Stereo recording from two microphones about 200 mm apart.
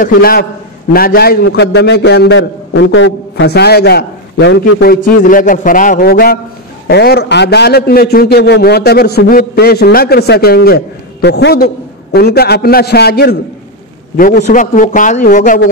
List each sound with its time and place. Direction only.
0.0 s a man's voice: 45° left (ahead or behind)